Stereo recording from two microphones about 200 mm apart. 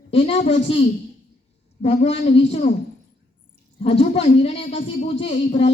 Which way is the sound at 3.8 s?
30° left (ahead or behind).